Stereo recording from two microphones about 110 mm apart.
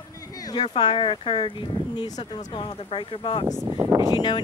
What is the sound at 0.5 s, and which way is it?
Speech, 40° left (ahead or behind).